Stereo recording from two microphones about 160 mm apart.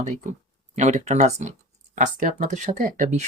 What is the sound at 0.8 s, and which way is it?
Speech, 45° right (ahead or behind).